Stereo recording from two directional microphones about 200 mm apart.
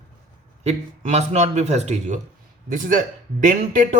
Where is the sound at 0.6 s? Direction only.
35° right (ahead or behind).